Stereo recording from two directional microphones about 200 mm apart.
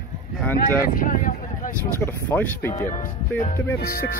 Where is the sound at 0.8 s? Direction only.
45° left (ahead or behind).